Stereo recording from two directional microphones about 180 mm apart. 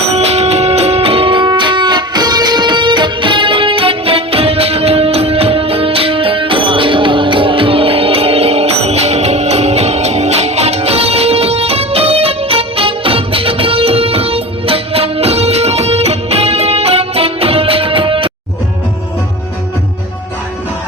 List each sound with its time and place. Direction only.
0.1 s music: 35° right (ahead or behind)